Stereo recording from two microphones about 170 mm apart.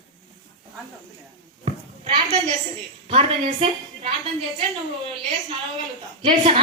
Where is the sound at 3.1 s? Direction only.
35° right (ahead or behind).